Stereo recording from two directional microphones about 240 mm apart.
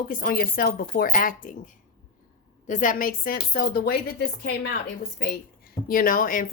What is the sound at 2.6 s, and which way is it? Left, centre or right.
Speech, left.